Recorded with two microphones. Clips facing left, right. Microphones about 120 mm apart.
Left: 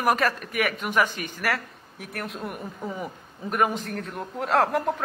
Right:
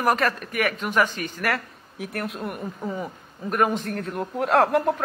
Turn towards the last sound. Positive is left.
turn(degrees=0)  # may be behind; listen again after turning